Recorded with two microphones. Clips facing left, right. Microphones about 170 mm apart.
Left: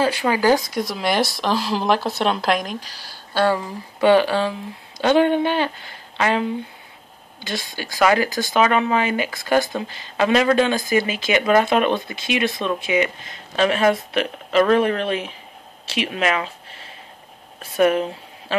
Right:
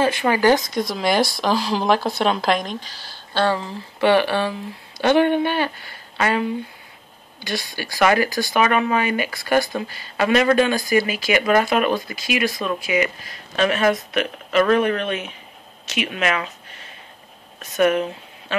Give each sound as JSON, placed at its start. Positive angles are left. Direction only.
{"t": 0.0, "sound": "speech", "side_deg": 10}
{"t": 7.4, "sound": "speech", "side_deg": 20}
{"t": 11.7, "sound": "speech", "side_deg": -5}
{"t": 12.1, "sound": "speech", "side_deg": 25}
{"t": 16.3, "sound": "a sound", "side_deg": 30}
{"t": 17.6, "sound": "speech", "side_deg": 30}